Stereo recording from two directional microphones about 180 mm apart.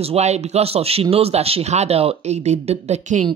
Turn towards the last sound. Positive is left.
turn(degrees=-40)  # may be behind; listen again after turning